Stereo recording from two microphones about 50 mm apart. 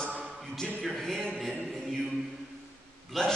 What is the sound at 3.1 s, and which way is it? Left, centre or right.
Speech, centre.